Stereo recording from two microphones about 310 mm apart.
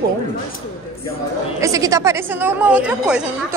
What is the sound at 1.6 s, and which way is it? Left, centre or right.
A woman's voice, centre.